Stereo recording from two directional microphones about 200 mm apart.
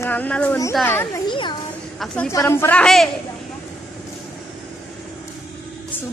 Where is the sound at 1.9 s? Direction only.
5° left (ahead or behind).